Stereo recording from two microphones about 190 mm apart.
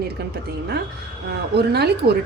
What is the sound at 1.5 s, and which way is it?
Speech, 60° right (ahead or behind).